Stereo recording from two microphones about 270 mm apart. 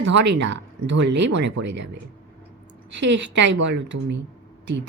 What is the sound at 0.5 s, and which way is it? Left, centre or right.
Speech, right.